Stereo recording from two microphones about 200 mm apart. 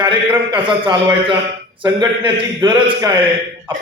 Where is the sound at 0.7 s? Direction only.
25° right (ahead or behind).